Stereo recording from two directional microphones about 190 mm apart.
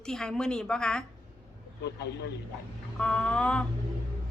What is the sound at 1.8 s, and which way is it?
Speech, 60° left (ahead or behind).